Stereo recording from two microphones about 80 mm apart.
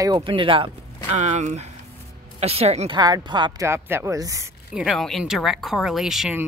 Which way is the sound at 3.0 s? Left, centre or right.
Right.